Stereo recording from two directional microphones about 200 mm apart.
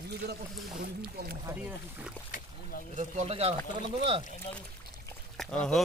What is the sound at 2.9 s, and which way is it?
Speech, 35° right (ahead or behind).